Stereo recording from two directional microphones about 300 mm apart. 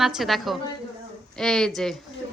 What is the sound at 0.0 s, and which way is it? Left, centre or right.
Speech, centre.